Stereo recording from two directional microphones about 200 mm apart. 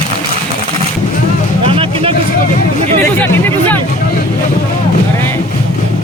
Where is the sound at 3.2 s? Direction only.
10° left (ahead or behind).